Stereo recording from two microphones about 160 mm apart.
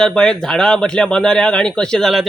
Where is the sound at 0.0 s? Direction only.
5° left (ahead or behind).